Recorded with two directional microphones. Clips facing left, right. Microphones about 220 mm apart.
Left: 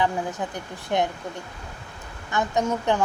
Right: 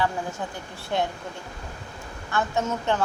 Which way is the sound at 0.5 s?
20° left (ahead or behind).